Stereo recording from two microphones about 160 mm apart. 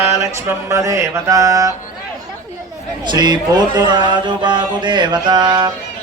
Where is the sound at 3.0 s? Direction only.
25° right (ahead or behind).